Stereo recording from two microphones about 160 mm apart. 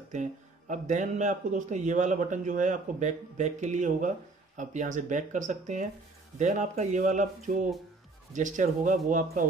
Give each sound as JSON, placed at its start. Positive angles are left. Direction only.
{"t": 0.1, "sound": "speech", "side_deg": -50}